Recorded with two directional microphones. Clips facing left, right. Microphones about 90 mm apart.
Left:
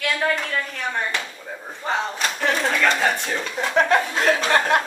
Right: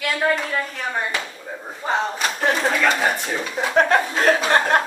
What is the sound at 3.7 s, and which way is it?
Speech, 40° right (ahead or behind).